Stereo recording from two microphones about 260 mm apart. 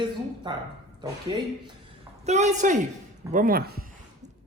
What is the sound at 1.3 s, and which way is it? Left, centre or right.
A woman's voice, centre.